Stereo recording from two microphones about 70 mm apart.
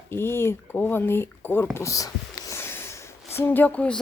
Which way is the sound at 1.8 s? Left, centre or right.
Left.